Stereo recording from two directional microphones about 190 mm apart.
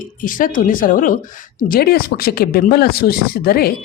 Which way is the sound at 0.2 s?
45° left (ahead or behind).